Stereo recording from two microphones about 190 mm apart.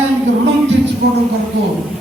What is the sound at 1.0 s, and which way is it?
Speech, 60° right (ahead or behind).